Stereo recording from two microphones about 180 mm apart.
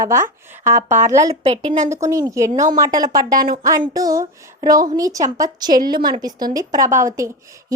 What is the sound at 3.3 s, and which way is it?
Speech, 55° right (ahead or behind).